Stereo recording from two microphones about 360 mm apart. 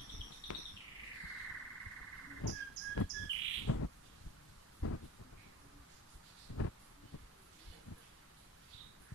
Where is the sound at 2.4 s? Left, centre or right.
Left.